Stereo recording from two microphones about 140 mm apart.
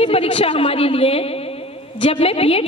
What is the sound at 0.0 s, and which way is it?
A man's voice, 45° left (ahead or behind).